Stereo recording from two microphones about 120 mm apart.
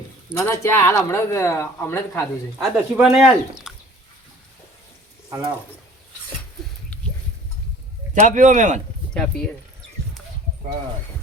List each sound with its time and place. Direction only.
0.3 s speech: 20° left (ahead or behind)
2.6 s speech: centre (ahead or behind)
6.9 s a sound: 10° left (ahead or behind)
8.1 s speech: 90° right
9.1 s speech: 5° left (ahead or behind)